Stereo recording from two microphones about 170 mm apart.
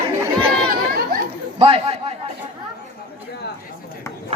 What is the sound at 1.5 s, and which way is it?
Speech, 35° right (ahead or behind).